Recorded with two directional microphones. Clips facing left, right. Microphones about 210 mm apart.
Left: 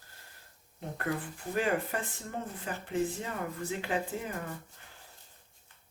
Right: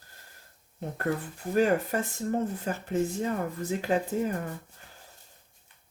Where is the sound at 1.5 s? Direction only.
40° right (ahead or behind).